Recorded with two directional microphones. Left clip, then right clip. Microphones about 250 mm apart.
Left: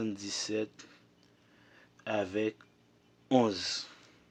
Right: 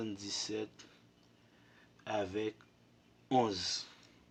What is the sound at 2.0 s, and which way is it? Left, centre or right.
Speech, left.